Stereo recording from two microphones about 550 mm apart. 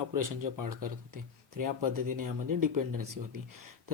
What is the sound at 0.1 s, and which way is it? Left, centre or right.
Speech, right.